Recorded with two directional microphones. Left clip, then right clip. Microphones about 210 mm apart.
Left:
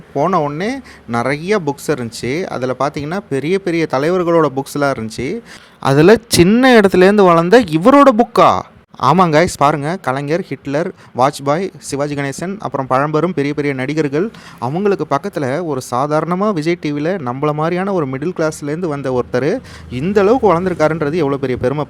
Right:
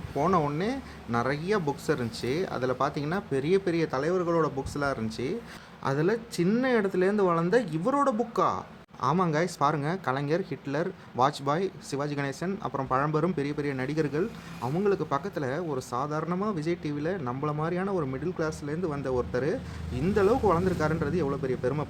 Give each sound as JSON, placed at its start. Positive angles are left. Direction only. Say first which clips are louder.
{"t": 0.2, "sound": "speech", "louder": "left 11 dB", "side_deg": 35}
{"t": 5.8, "sound": "speech", "louder": "left 18 dB", "side_deg": 45}